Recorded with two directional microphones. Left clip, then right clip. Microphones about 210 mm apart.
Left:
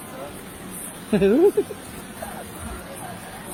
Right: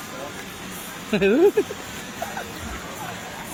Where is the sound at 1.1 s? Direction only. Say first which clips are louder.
Left 1 dB; 5° left (ahead or behind).